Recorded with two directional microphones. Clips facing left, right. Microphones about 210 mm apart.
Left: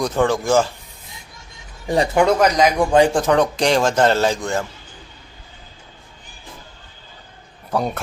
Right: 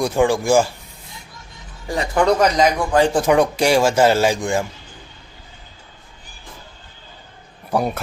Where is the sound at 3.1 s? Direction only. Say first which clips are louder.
Right 1 dB; 10° right (ahead or behind).